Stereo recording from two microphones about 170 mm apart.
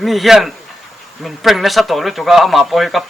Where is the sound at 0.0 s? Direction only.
Centre (ahead or behind).